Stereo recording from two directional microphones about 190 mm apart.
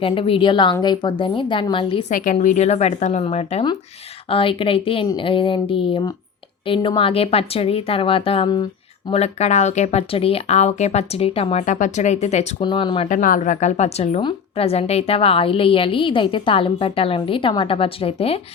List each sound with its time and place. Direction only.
0.0 s a woman's voice: 30° left (ahead or behind)
2.0 s a woman's voice: 45° left (ahead or behind)
12.6 s a woman's voice: 25° left (ahead or behind)
13.1 s a woman's voice: 45° left (ahead or behind)